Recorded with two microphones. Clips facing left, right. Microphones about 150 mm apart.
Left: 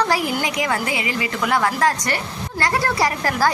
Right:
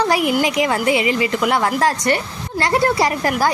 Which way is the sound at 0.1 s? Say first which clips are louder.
Right 4 dB; 20° right (ahead or behind).